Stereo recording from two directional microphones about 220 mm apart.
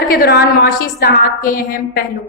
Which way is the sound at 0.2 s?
45° left (ahead or behind).